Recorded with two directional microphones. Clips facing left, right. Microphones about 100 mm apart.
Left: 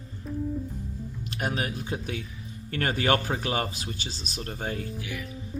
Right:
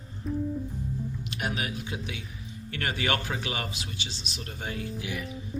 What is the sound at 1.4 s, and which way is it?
A man's voice, 40° left (ahead or behind).